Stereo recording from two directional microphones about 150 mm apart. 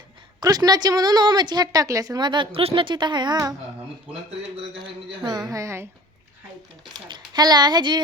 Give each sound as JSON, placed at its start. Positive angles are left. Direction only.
{"t": 0.3, "sound": "a woman's voice", "side_deg": -25}
{"t": 4.8, "sound": "a woman's voice", "side_deg": -25}
{"t": 7.1, "sound": "a woman's voice", "side_deg": -25}